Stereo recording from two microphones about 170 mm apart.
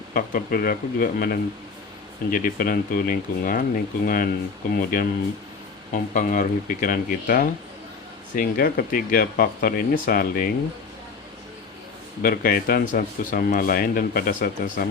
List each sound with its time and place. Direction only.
0.1 s speech: 55° left (ahead or behind)
12.2 s speech: 60° left (ahead or behind)